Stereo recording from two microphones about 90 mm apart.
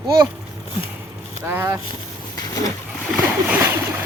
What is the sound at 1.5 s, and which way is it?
Speech, 25° right (ahead or behind).